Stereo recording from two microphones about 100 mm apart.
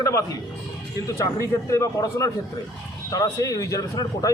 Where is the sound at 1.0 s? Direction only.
30° left (ahead or behind).